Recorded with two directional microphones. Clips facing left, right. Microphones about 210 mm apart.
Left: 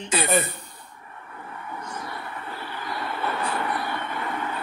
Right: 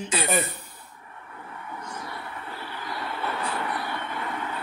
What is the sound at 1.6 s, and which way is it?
Train, 55° left (ahead or behind).